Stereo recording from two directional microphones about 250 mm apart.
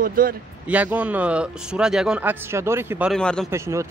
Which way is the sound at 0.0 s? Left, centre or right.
Right.